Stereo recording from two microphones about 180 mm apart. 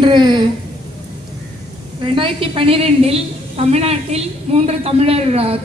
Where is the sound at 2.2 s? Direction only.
30° right (ahead or behind).